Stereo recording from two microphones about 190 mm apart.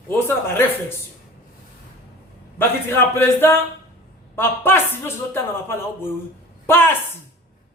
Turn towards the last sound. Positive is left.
turn(degrees=10)  # may be behind; listen again after turning